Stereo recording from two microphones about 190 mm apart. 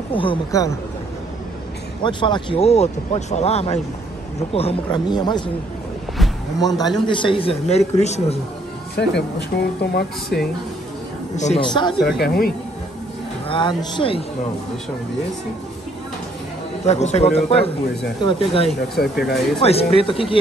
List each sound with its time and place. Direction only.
0.1 s speech: 25° left (ahead or behind)
2.0 s speech: 25° left (ahead or behind)
6.6 s speech: 20° left (ahead or behind); by 8.4 s 35° left (ahead or behind)
8.9 s speech: 60° left (ahead or behind)
11.3 s speech: 40° left (ahead or behind)
11.6 s speech: 25° left (ahead or behind)
12.2 s speech: 55° left (ahead or behind)
13.5 s speech: 25° left (ahead or behind)
16.8 s speech: 35° left (ahead or behind)
18.9 s speech: centre (ahead or behind)
19.6 s speech: 30° left (ahead or behind)